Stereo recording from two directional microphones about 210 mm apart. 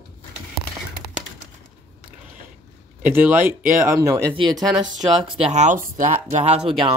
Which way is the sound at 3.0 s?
10° right (ahead or behind).